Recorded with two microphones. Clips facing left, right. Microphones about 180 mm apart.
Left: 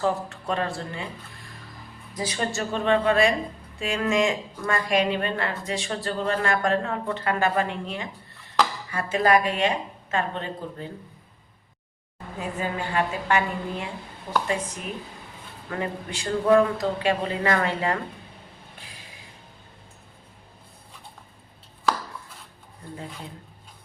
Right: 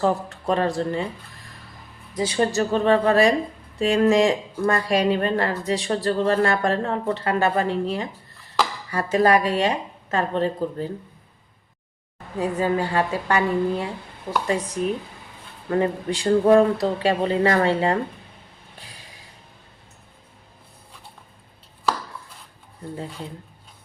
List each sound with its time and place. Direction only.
0.0 s speech: 35° right (ahead or behind)
2.1 s speech: 30° right (ahead or behind)
12.4 s speech: 35° right (ahead or behind)
14.3 s speech: 50° right (ahead or behind)
15.7 s speech: 35° right (ahead or behind)